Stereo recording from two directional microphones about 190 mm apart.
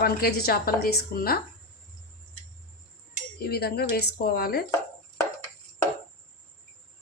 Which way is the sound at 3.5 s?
55° left (ahead or behind).